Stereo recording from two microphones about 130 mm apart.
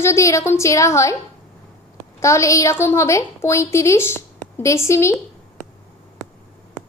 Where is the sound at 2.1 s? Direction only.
20° left (ahead or behind).